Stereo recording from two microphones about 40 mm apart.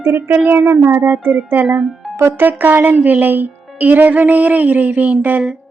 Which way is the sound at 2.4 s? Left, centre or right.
Right.